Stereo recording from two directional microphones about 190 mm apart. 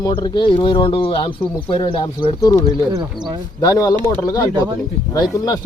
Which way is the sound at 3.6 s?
20° left (ahead or behind).